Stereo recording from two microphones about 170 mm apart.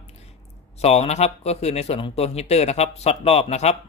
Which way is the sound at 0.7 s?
40° left (ahead or behind).